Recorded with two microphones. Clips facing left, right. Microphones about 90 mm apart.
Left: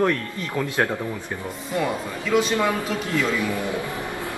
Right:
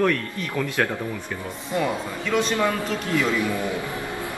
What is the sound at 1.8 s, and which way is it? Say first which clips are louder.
Speech: even; 5° left (ahead or behind).